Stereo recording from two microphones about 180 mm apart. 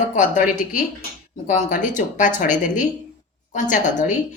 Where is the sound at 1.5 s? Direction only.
45° left (ahead or behind).